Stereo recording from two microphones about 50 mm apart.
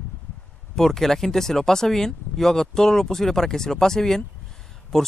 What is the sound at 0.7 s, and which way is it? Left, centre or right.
Speech, centre.